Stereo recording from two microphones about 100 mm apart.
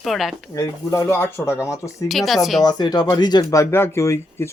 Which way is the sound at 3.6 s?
25° left (ahead or behind).